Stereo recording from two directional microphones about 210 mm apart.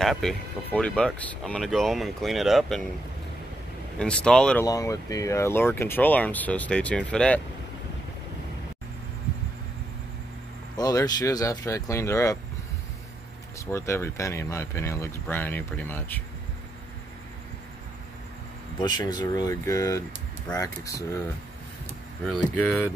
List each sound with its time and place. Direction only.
0.0 s speech: centre (ahead or behind)
4.0 s speech: 5° left (ahead or behind)
4.6 s speech: 15° left (ahead or behind)
10.8 s speech: 20° left (ahead or behind)
13.7 s speech: 10° left (ahead or behind)
18.8 s speech: 20° left (ahead or behind)
22.2 s speech: 5° left (ahead or behind)